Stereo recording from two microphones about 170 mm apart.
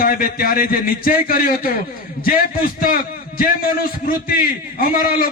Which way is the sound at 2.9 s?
55° left (ahead or behind).